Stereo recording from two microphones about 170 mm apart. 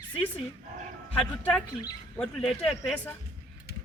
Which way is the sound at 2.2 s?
5° left (ahead or behind).